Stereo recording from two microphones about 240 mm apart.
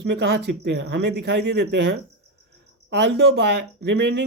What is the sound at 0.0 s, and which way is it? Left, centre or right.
Speech, right.